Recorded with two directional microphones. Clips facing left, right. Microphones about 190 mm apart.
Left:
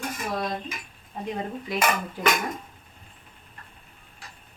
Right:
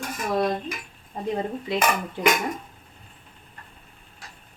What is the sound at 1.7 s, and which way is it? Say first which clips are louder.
Speech: right 2 dB; 25° right (ahead or behind).